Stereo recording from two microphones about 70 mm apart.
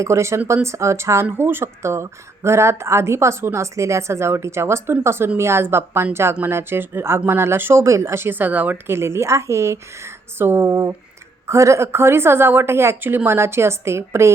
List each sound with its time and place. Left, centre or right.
0.0 s speech: right
8.9 s speech: right